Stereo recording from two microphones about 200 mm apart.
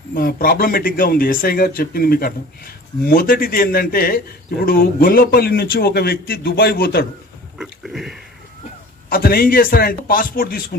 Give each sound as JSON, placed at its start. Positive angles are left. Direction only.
{"t": 0.1, "sound": "speech", "side_deg": 50}
{"t": 7.5, "sound": "a sound", "side_deg": 0}
{"t": 9.1, "sound": "speech", "side_deg": 50}